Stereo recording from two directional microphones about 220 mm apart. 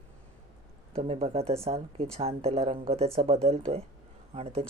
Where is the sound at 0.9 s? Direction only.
25° right (ahead or behind).